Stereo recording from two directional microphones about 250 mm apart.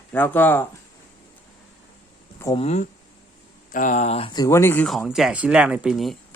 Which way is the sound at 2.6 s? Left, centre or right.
Left.